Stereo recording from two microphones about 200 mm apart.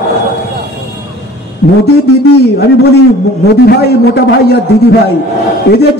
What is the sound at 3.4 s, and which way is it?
Speech, 55° left (ahead or behind).